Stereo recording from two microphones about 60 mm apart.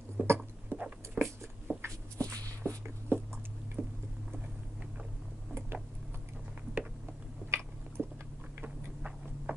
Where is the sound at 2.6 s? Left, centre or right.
Centre.